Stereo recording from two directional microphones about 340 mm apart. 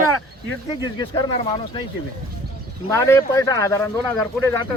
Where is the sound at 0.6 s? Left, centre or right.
Centre.